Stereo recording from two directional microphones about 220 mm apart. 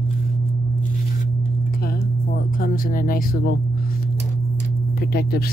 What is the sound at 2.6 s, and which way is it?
Speech, 40° left (ahead or behind).